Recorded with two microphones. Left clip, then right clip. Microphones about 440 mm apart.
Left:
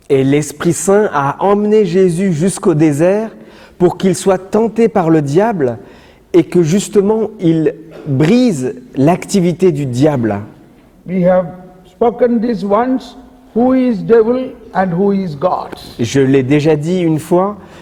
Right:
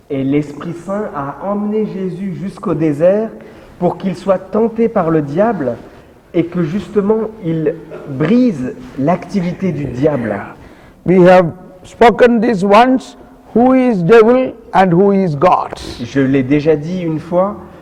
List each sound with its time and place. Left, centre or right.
0.1 s speech: left
11.0 s a man's voice: right
16.0 s speech: left